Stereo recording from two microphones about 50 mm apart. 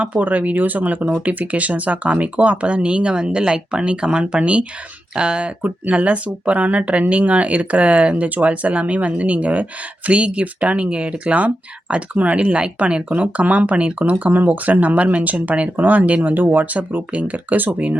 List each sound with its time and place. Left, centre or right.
0.0 s speech: right
5.6 s speech: right